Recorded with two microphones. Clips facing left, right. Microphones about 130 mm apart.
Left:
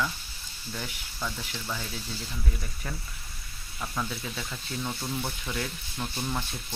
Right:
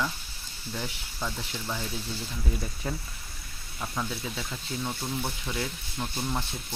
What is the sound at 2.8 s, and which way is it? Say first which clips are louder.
Speech: right 4 dB; 20° right (ahead or behind).